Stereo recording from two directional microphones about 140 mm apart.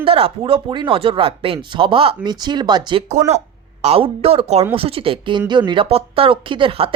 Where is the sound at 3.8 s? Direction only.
45° right (ahead or behind).